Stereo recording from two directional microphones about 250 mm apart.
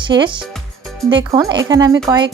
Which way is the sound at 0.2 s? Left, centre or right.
Centre.